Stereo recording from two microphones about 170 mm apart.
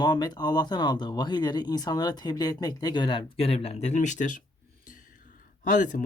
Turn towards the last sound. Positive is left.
turn(degrees=50)  # may be behind; listen again after turning